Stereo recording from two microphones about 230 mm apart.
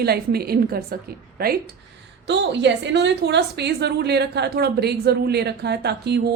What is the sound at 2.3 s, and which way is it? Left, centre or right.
A woman's voice, right.